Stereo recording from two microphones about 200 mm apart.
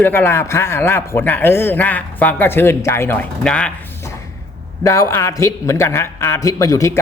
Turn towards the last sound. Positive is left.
turn(degrees=15)  # may be behind; listen again after turning